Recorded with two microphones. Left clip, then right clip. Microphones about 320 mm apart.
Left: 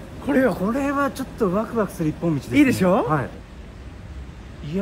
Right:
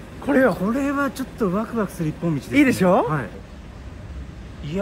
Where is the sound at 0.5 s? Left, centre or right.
Centre.